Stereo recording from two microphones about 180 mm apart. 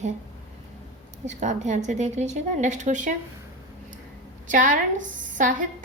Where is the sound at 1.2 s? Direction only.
40° right (ahead or behind).